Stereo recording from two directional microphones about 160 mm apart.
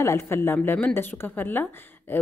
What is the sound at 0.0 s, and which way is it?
A woman's voice, 15° left (ahead or behind).